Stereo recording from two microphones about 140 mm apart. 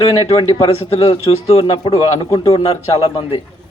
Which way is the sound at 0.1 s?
40° left (ahead or behind).